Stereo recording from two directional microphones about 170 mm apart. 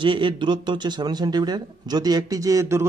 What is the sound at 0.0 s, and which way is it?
Speech, 30° right (ahead or behind).